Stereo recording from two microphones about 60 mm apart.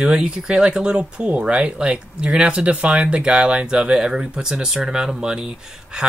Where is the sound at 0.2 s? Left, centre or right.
Centre.